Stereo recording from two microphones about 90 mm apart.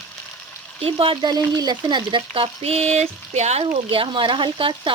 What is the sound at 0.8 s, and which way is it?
Speech, 80° right.